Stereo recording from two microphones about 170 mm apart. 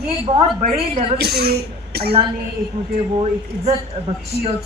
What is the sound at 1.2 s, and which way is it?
Speech, 70° right (ahead or behind).